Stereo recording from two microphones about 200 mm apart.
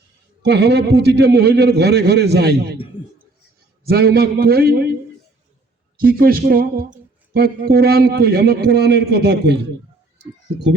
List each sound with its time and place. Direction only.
0.4 s a man's voice: 55° right (ahead or behind)
3.8 s a man's voice: 50° right (ahead or behind)
6.1 s a man's voice: 45° right (ahead or behind)